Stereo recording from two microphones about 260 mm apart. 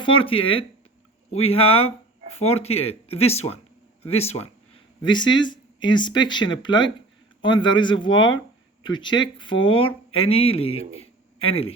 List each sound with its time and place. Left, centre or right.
0.0 s speech: left